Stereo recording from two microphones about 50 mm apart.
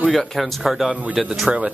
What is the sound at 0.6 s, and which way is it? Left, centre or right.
Speech, centre.